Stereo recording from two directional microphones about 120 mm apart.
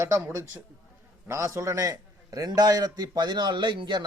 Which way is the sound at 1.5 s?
25° right (ahead or behind).